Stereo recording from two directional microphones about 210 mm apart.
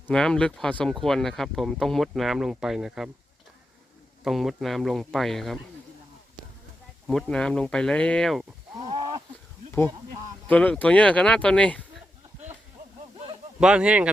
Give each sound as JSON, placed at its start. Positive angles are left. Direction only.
{"t": 0.1, "sound": "speech", "side_deg": 5}
{"t": 4.2, "sound": "speech", "side_deg": 0}
{"t": 7.1, "sound": "speech", "side_deg": 5}
{"t": 8.8, "sound": "a sound", "side_deg": -25}
{"t": 10.5, "sound": "speech", "side_deg": 5}
{"t": 13.6, "sound": "speech", "side_deg": -5}